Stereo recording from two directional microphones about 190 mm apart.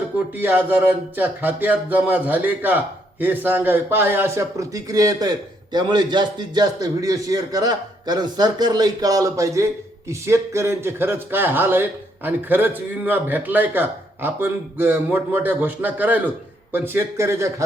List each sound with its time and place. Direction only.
0.3 s music: 10° right (ahead or behind)